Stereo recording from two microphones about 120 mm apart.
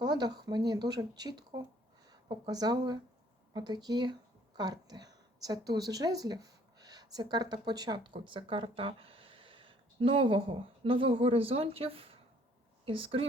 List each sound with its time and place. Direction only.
0.0 s a woman's voice: 35° right (ahead or behind)